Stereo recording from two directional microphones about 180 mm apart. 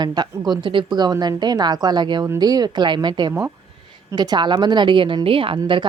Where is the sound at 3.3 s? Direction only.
15° right (ahead or behind).